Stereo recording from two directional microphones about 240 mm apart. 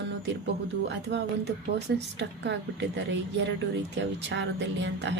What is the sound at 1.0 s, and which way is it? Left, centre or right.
Speech, right.